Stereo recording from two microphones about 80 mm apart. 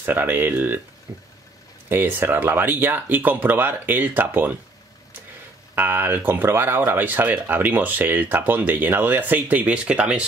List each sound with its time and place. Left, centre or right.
0.0 s speech: right
1.1 s a sound: right
1.9 s speech: right
5.8 s speech: right